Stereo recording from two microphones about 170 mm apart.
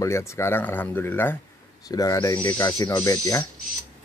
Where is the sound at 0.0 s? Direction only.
15° left (ahead or behind).